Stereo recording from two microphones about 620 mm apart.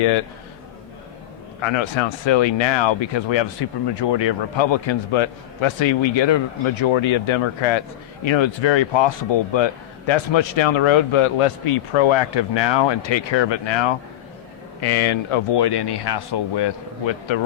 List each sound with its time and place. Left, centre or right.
1.6 s speech: left